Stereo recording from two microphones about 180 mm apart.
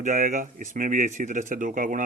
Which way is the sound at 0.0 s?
45° right (ahead or behind).